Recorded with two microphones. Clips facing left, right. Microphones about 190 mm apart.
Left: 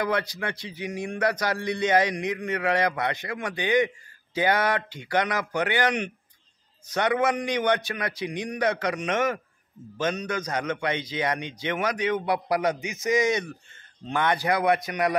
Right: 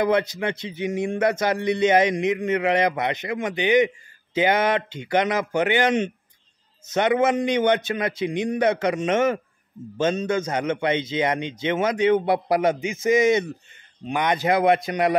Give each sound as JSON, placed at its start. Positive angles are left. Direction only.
{"t": 0.0, "sound": "speech", "side_deg": -25}